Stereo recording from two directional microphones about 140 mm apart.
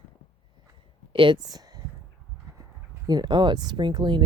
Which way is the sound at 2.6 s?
25° right (ahead or behind).